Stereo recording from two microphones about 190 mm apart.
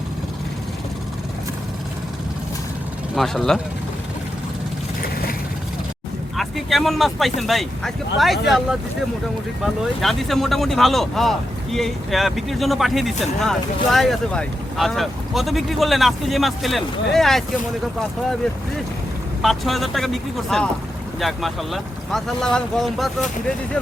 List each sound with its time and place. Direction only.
3.2 s speech: centre (ahead or behind)
6.3 s speech: centre (ahead or behind)
19.4 s speech: centre (ahead or behind)